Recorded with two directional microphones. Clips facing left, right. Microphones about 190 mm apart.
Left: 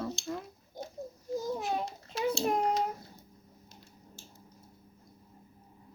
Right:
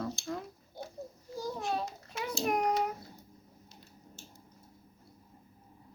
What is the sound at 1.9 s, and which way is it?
Child singing, 30° left (ahead or behind).